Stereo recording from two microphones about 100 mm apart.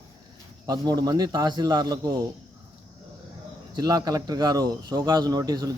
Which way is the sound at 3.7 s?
40° right (ahead or behind).